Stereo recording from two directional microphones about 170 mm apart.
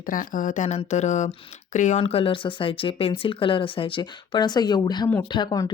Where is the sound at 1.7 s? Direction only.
45° left (ahead or behind); by 5.7 s 25° left (ahead or behind).